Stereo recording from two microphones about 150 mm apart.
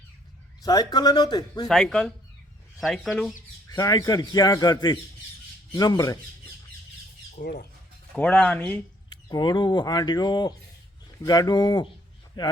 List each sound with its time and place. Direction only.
0.6 s speech: 25° left (ahead or behind)
1.6 s speech: centre (ahead or behind)
3.7 s speech: 25° left (ahead or behind)
7.4 s speech: 70° left (ahead or behind)
8.1 s speech: 10° left (ahead or behind)
9.0 s speech: 30° left (ahead or behind)